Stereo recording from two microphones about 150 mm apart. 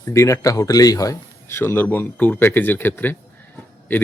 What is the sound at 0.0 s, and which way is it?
A man's voice, 20° left (ahead or behind).